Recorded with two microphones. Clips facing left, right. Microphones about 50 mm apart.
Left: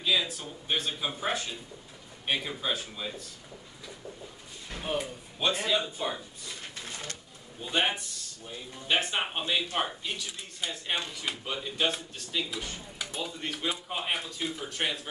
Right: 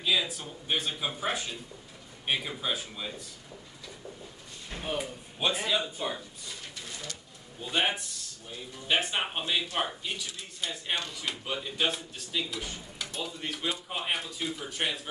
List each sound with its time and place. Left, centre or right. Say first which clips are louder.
0.0 s speech: even; centre
4.9 s speech: left 4 dB; centre
6.7 s a sound: left 1 dB; left
7.6 s speech: even; centre